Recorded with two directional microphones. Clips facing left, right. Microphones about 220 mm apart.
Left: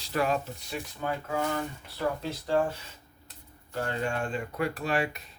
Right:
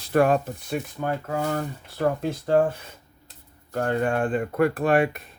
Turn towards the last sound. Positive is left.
turn(degrees=-55)  # may be behind; listen again after turning